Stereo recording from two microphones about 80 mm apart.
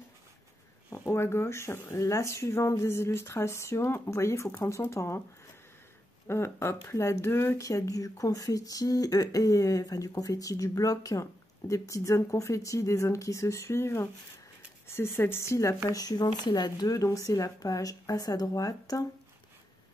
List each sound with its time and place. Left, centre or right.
0.8 s speech: left
6.2 s speech: left
16.3 s speech: left
16.9 s speech: left